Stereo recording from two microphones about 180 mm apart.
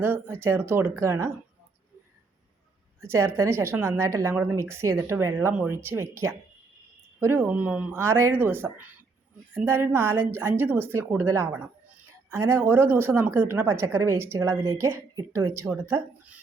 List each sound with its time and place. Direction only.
0.0 s a woman's voice: 10° right (ahead or behind)
3.1 s a woman's voice: 15° right (ahead or behind)